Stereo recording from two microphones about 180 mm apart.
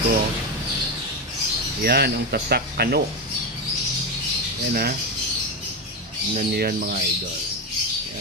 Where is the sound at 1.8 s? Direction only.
60° right (ahead or behind).